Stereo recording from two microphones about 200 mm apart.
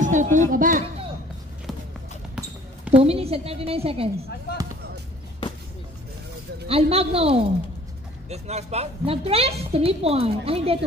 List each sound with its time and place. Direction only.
0.0 s a sound: 40° right (ahead or behind)
0.5 s speech: 45° right (ahead or behind)
2.3 s basketball bounce: 5° right (ahead or behind)
3.0 s a woman's voice: 30° right (ahead or behind)
6.7 s a woman's voice: 30° right (ahead or behind)